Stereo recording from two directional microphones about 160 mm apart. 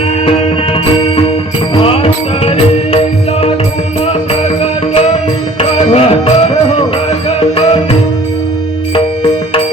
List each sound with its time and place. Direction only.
1.7 s music: 35° left (ahead or behind)
4.0 s music: 40° left (ahead or behind)